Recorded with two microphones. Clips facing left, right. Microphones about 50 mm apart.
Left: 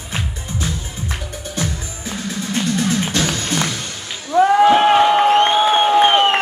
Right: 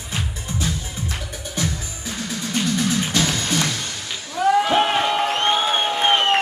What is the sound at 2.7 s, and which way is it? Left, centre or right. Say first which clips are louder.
Music: left 2 dB; left.